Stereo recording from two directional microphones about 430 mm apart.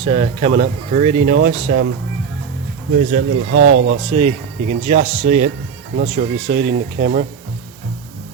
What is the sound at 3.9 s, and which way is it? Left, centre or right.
Speech, centre.